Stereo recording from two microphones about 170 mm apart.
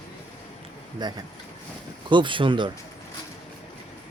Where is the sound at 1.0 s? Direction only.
25° right (ahead or behind).